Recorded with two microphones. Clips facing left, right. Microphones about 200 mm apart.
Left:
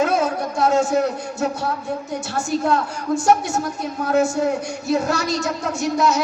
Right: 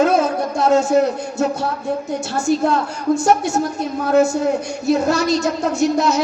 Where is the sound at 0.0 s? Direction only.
25° right (ahead or behind).